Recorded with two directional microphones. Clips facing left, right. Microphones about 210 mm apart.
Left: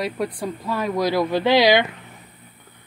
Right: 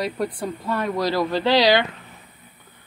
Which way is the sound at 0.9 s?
15° left (ahead or behind).